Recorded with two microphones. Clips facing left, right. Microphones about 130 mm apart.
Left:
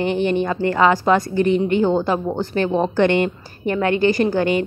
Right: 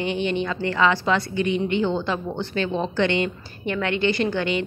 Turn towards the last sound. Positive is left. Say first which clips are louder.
# left 5 dB
turn(degrees=45)  # may be behind; listen again after turning